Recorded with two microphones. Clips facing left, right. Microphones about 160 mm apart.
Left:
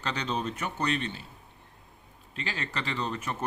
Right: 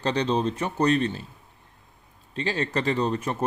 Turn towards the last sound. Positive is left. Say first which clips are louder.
# right 7 dB
turn(degrees=-35)  # may be behind; listen again after turning